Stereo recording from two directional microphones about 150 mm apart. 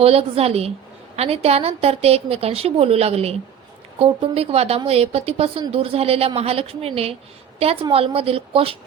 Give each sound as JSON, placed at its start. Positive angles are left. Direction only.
{"t": 0.0, "sound": "a woman's voice", "side_deg": -40}